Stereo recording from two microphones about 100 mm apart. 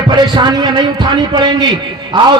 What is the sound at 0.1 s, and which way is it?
A man's voice, 50° right (ahead or behind).